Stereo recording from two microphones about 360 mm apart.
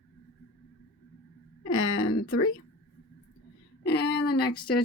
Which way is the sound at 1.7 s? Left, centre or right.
Left.